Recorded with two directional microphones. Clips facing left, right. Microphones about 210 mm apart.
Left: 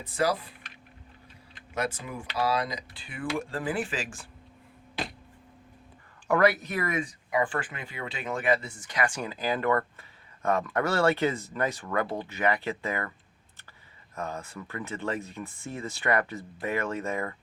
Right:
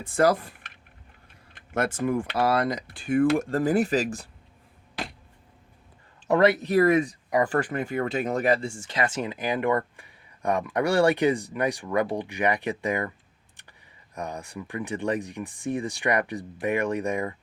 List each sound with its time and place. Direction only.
0.0 s speech: 50° right (ahead or behind)
6.2 s speech: 25° right (ahead or behind)
14.2 s speech: 15° right (ahead or behind)